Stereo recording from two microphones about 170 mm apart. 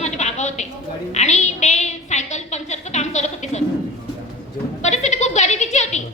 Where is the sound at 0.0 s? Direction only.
40° left (ahead or behind).